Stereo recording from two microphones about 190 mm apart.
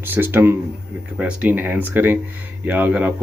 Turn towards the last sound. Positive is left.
turn(degrees=-10)  # may be behind; listen again after turning